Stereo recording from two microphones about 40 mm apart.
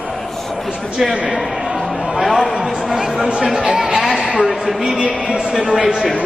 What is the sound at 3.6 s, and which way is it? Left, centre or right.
Speech, centre.